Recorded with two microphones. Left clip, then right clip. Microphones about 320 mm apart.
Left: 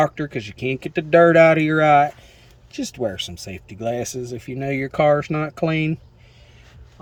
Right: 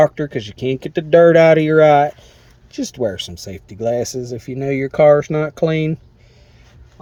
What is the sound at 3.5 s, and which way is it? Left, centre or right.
Speech, right.